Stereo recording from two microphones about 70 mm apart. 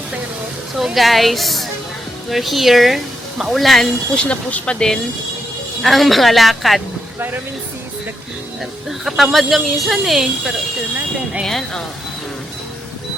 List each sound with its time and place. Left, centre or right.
0.9 s a woman's voice: centre
4.1 s speech: centre
5.8 s a woman's voice: centre
8.9 s a woman's voice: centre
11.4 s speech: centre